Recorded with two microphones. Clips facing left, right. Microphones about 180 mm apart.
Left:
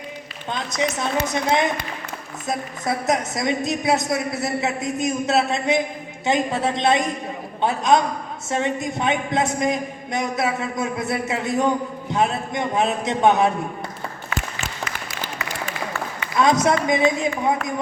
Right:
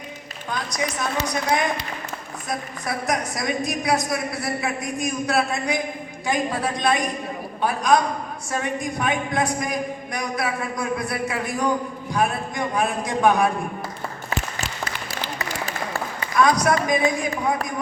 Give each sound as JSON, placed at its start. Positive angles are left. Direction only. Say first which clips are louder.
{"t": 0.5, "sound": "a woman's voice", "louder": "left 3 dB", "side_deg": 25}
{"t": 15.4, "sound": "a sound", "louder": "left 1 dB", "side_deg": -35}
{"t": 16.3, "sound": "a woman's voice", "louder": "left 1 dB", "side_deg": 25}